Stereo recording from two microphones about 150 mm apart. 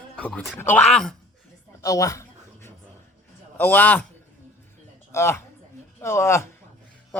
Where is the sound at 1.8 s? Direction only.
20° left (ahead or behind).